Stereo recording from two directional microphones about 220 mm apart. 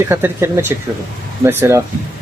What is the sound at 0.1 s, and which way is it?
Speech, 10° right (ahead or behind).